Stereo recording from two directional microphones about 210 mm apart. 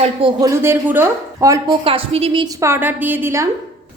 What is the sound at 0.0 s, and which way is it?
A woman's voice, 25° right (ahead or behind).